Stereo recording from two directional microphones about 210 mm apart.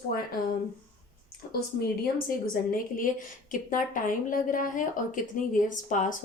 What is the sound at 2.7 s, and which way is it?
A woman's voice, 40° left (ahead or behind).